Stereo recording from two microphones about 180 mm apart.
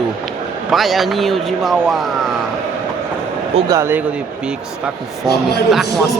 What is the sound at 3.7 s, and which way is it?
Speech, 15° right (ahead or behind).